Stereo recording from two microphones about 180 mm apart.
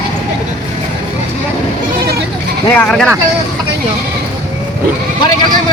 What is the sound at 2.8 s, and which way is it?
Speech, 5° left (ahead or behind).